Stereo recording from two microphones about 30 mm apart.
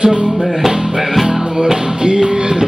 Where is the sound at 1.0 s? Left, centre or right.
Centre.